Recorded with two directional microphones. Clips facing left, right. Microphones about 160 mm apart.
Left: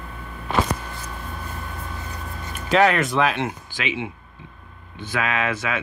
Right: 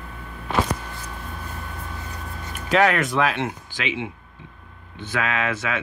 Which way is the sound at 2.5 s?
25° left (ahead or behind).